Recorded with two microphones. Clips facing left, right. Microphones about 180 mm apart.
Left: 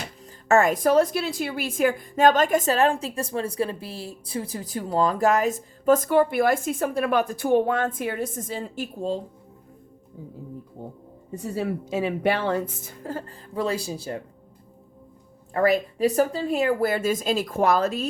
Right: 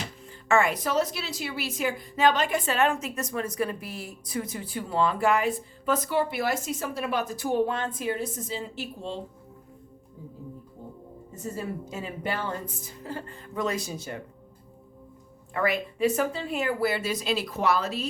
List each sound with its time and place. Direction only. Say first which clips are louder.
0.4 s a woman's voice: left 5 dB; 45° left (ahead or behind)
11.3 s speech: left 6 dB; 75° left (ahead or behind)
12.8 s speech: left 4 dB; 45° left (ahead or behind)
15.5 s a woman's voice: left 6 dB; 40° left (ahead or behind)